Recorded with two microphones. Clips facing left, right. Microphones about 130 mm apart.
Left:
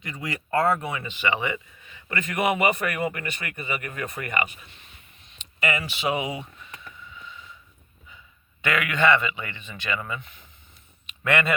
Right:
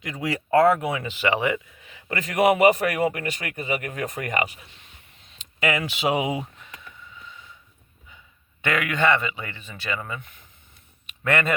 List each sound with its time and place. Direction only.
0.0 s speech: 90° right; by 3.5 s 70° right (ahead or behind)
3.5 s speech: 60° right (ahead or behind)
5.5 s speech: 90° right
8.6 s speech: 45° right (ahead or behind)